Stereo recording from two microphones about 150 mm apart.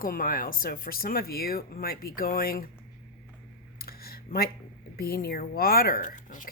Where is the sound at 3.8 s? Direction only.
90° left.